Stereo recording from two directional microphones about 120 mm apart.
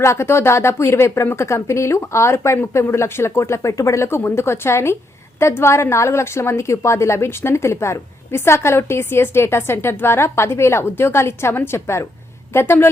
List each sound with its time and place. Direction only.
0.0 s a woman's voice: 20° left (ahead or behind)